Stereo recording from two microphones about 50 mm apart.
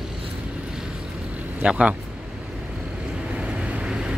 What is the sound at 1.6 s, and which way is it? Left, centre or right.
Speech, right.